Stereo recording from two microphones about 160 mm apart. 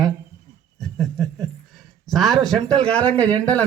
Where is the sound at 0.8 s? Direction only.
Centre (ahead or behind).